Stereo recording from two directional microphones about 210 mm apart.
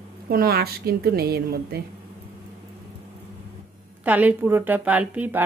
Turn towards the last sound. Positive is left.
turn(degrees=-10)  # may be behind; listen again after turning